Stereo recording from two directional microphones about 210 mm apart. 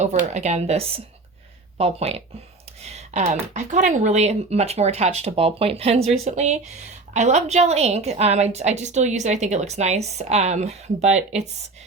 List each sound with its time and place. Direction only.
0.0 s a woman's voice: 35° right (ahead or behind)